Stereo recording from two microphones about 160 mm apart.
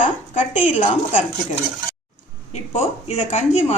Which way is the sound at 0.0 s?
50° left (ahead or behind).